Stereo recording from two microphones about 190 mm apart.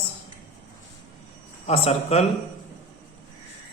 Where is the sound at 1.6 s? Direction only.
30° left (ahead or behind).